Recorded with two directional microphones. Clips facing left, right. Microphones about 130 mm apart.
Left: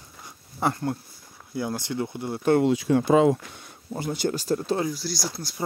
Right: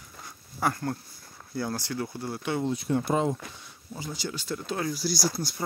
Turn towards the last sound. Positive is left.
turn(degrees=-5)  # may be behind; listen again after turning